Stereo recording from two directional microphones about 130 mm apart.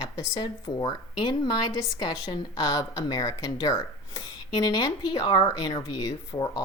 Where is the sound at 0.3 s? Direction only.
35° left (ahead or behind).